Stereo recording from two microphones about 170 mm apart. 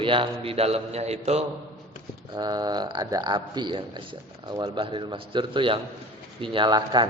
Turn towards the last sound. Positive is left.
turn(degrees=-25)  # may be behind; listen again after turning